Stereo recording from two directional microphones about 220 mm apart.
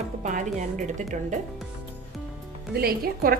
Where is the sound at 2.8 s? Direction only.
40° right (ahead or behind).